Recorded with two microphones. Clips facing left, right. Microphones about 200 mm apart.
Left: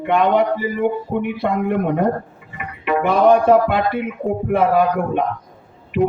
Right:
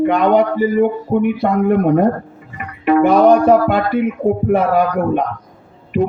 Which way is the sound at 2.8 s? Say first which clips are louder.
Right 4 dB; 45° right (ahead or behind).